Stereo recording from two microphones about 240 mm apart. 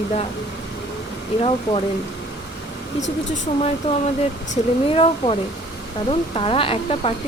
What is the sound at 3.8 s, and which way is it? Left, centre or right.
Speech, left.